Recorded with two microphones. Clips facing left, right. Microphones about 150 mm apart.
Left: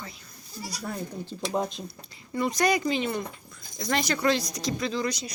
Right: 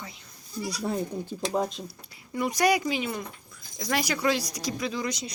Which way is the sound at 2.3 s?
10° right (ahead or behind).